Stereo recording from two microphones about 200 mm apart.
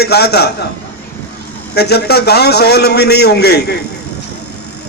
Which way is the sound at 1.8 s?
55° left (ahead or behind).